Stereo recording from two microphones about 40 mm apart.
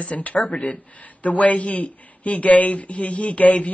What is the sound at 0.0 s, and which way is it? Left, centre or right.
Speech, left.